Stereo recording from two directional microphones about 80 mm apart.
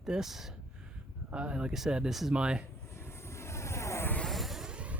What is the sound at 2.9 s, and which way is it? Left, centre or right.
Vehicle, left.